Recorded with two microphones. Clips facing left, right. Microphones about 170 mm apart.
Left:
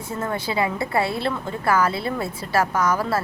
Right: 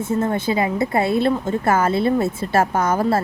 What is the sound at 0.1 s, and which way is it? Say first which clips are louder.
A woman's voice: right 5 dB; 25° right (ahead or behind).